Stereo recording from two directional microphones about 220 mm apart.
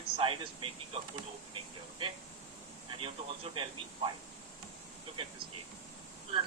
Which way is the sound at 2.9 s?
25° right (ahead or behind).